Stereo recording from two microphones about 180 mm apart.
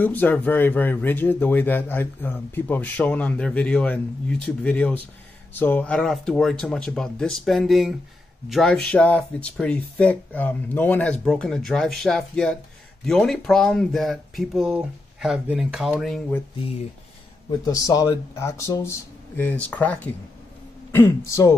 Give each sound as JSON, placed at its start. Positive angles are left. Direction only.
{"t": 0.0, "sound": "speech", "side_deg": 10}
{"t": 17.6, "sound": "speech", "side_deg": 20}